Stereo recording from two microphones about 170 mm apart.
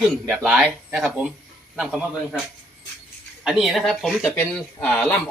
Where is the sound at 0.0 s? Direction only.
5° right (ahead or behind).